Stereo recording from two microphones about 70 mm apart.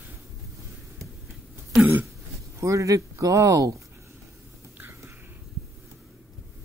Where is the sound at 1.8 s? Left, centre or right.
Right.